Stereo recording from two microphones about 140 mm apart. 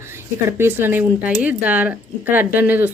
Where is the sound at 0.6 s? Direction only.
15° right (ahead or behind).